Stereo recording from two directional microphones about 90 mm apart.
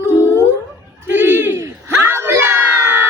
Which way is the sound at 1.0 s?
25° right (ahead or behind).